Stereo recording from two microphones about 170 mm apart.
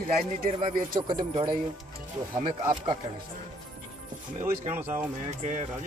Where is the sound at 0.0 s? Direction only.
60° right (ahead or behind).